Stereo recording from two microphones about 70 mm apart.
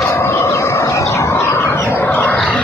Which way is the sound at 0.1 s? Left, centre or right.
Left.